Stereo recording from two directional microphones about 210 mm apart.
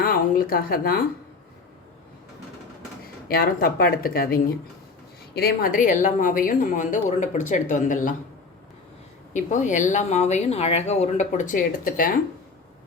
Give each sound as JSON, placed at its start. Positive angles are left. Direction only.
{"t": 0.0, "sound": "a woman's voice", "side_deg": 45}
{"t": 3.2, "sound": "a woman's voice", "side_deg": 45}
{"t": 9.3, "sound": "a woman's voice", "side_deg": 35}